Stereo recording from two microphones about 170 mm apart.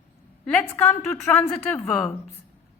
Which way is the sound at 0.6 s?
10° left (ahead or behind).